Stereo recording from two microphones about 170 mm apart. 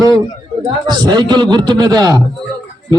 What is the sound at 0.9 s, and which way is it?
Speech, 25° right (ahead or behind).